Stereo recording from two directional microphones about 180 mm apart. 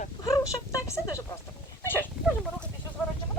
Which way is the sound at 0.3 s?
20° left (ahead or behind).